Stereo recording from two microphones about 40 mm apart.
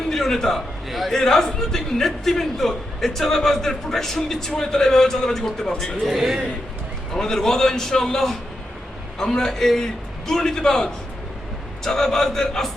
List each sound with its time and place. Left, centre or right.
0.1 s a man's voice: centre
1.1 s a man's voice: centre
6.1 s a man's voice: centre
7.1 s a man's voice: centre